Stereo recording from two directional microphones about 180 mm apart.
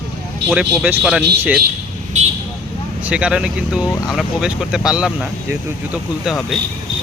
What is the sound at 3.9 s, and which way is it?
Speech, 20° left (ahead or behind).